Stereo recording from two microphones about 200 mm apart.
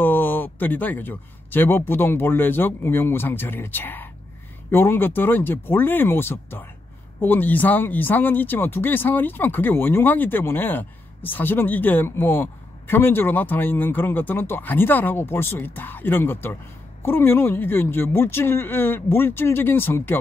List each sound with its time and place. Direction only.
0.0 s speech: 10° left (ahead or behind)